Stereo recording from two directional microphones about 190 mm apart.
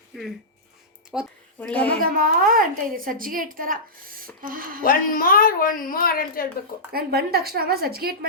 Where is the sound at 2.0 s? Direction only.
50° right (ahead or behind).